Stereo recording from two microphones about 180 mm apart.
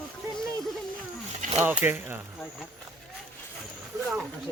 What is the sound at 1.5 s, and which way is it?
Speech, 10° right (ahead or behind).